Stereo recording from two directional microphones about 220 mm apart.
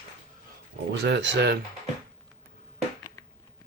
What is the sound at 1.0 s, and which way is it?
Speech, 50° right (ahead or behind).